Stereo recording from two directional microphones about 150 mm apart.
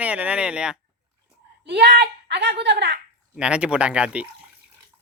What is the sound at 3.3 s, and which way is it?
Speech, 5° right (ahead or behind).